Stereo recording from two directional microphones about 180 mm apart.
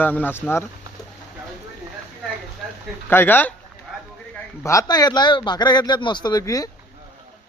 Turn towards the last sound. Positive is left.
turn(degrees=20)  # may be behind; listen again after turning